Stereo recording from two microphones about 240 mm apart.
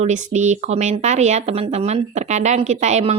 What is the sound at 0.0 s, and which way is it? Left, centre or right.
A woman's voice, right.